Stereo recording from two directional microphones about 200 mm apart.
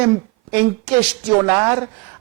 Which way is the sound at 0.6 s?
15° right (ahead or behind).